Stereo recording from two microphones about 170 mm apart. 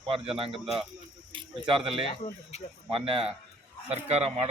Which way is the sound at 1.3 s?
30° right (ahead or behind).